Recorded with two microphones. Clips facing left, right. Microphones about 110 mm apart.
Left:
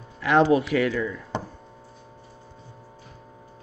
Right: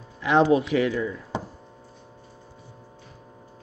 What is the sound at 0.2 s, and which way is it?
Speech, 20° right (ahead or behind).